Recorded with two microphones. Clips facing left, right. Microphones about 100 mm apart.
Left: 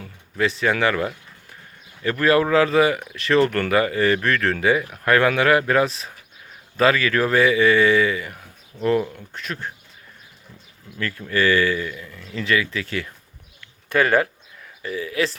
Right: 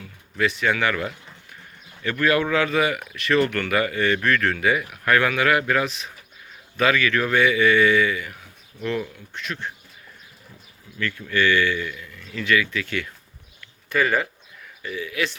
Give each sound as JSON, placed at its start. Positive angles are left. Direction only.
{"t": 0.0, "sound": "speech", "side_deg": 35}
{"t": 11.2, "sound": "speech", "side_deg": 35}
{"t": 14.8, "sound": "speech", "side_deg": 35}